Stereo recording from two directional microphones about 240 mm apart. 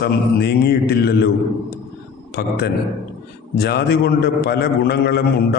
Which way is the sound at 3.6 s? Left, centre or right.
Left.